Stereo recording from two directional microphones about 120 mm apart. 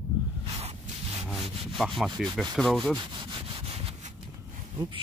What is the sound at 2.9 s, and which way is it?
Rub, 40° right (ahead or behind).